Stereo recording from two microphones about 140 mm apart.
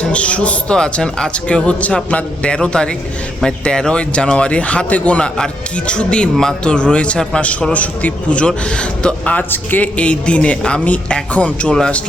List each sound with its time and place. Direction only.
0.0 s speech: 10° left (ahead or behind)